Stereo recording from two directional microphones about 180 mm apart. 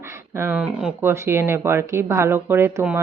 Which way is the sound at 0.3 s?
10° right (ahead or behind).